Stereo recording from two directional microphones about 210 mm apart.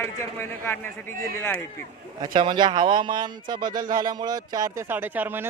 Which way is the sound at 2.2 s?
20° right (ahead or behind).